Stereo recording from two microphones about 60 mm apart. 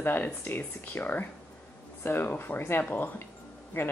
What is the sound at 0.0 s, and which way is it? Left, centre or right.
Speech, left.